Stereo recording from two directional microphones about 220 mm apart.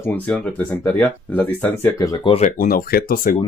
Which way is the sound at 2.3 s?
35° left (ahead or behind).